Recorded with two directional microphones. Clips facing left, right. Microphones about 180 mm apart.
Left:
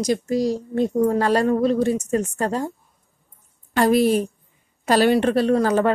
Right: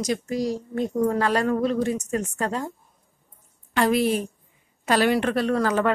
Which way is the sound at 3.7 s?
40° left (ahead or behind).